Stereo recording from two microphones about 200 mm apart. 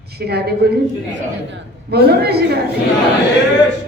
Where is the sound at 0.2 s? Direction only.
55° right (ahead or behind).